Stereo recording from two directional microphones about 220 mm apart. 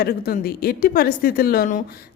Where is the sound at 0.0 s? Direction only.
45° left (ahead or behind).